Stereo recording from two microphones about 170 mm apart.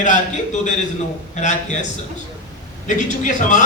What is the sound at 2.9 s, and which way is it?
Speech, 45° left (ahead or behind).